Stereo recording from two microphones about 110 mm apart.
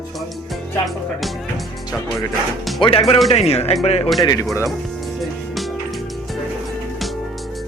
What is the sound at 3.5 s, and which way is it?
Speech, 70° left (ahead or behind).